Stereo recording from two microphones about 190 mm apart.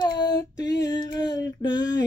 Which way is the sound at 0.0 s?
20° left (ahead or behind).